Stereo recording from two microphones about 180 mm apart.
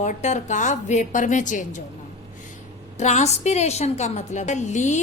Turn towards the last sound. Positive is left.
turn(degrees=40)  # may be behind; listen again after turning